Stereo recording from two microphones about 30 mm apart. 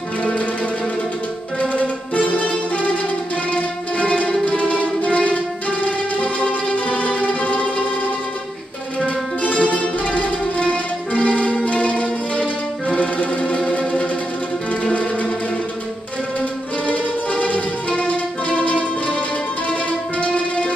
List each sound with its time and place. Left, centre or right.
1.6 s music: left
9.0 s music: left
16.3 s music: left